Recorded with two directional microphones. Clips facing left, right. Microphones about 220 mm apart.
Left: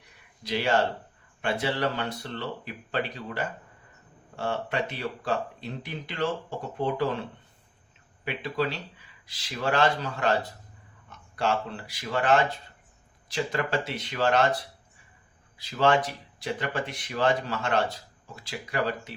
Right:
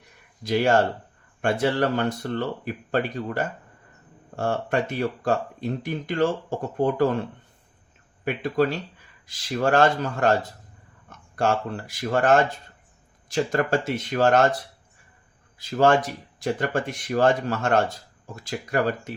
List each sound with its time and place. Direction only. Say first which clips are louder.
0.4 s speech: right 5 dB; 45° right (ahead or behind)
8.2 s speech: right 6 dB; 45° right (ahead or behind)
11.3 s speech: right 4 dB; 45° right (ahead or behind)
15.5 s speech: right 4 dB; 45° right (ahead or behind)